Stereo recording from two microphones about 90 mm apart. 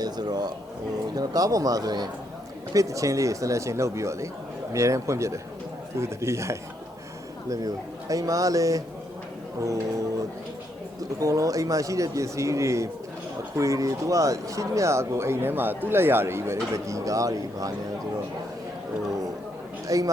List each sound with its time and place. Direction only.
0.0 s speech: 50° right (ahead or behind)
11.2 s speech: 40° right (ahead or behind)
19.9 s speech: 40° right (ahead or behind)